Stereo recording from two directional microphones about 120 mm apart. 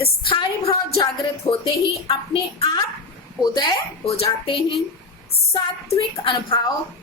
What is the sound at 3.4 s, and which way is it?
Speech, 35° left (ahead or behind).